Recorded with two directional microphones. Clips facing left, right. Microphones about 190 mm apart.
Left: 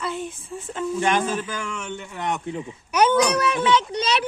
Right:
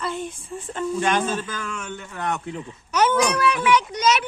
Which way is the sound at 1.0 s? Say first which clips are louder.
Left 1 dB; 15° left (ahead or behind).